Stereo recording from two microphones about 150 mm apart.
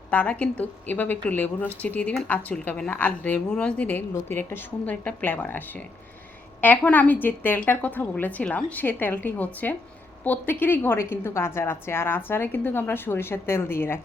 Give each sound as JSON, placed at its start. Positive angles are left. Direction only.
{"t": 0.1, "sound": "a woman's voice", "side_deg": 10}